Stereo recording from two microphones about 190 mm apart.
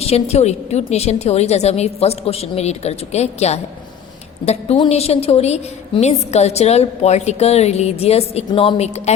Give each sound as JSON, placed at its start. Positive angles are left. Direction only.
{"t": 0.0, "sound": "a woman's voice", "side_deg": 30}